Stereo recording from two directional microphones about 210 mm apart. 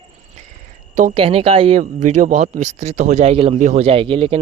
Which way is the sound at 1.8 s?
35° right (ahead or behind).